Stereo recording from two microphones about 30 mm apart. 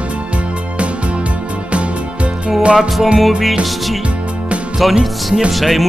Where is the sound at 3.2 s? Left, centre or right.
Centre.